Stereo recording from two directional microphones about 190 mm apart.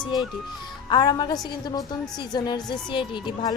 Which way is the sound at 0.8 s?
25° left (ahead or behind).